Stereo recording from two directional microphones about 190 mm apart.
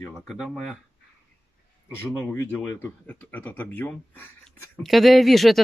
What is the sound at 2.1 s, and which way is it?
Speech, 15° left (ahead or behind).